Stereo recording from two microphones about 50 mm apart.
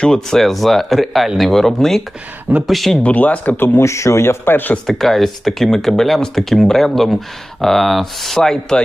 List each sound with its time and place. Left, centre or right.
0.3 s speech: centre
3.0 s speech: left
3.6 s speech: left
4.9 s speech: centre
8.4 s rub: centre